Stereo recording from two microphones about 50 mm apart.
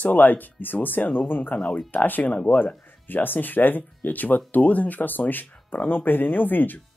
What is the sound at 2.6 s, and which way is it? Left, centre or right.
Speech, left.